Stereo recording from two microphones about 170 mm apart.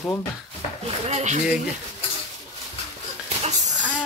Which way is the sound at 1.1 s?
45° right (ahead or behind).